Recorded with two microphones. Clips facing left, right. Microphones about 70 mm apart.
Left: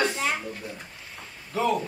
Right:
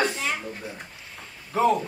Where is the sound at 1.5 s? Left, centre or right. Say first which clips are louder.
Right 4 dB; right.